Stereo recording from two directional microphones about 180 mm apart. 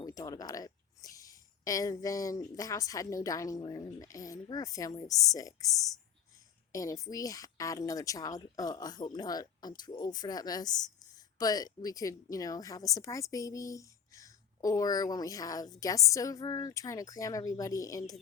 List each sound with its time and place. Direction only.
0.0 s speech: 20° left (ahead or behind)